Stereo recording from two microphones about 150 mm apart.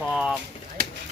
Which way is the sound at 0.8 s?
70° right (ahead or behind).